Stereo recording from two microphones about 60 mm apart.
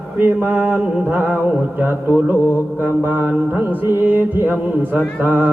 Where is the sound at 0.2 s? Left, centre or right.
Right.